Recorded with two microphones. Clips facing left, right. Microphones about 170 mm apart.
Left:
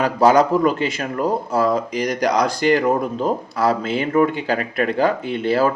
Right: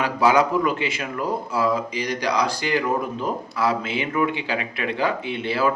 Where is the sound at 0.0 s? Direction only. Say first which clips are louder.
Left 4 dB; 40° left (ahead or behind).